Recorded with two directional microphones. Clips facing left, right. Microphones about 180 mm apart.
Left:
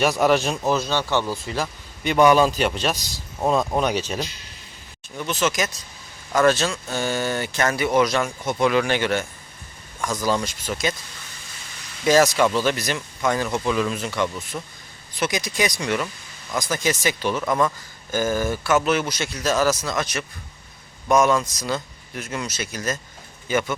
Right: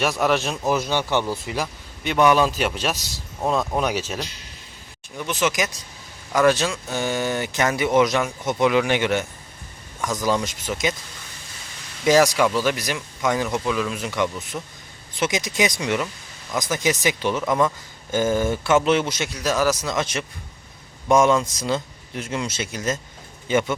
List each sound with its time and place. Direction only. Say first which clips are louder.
0.0 s a man's voice: left 2 dB; centre (ahead or behind)
0.7 s speech: right 1 dB; 15° right (ahead or behind)
1.6 s a man's voice: left 2 dB; centre (ahead or behind); by 9.2 s 20° right (ahead or behind)
10.2 s speech: right 1 dB; 15° right (ahead or behind)
12.0 s speech: even; 15° right (ahead or behind)
13.7 s a man's voice: left 2 dB; centre (ahead or behind)
14.0 s speech: right 1 dB; 15° right (ahead or behind)
14.5 s a man's voice: even; 5° right (ahead or behind)
15.2 s speech: right 1 dB; 20° right (ahead or behind)